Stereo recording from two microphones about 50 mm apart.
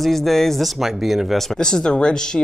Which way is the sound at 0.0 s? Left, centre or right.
Centre.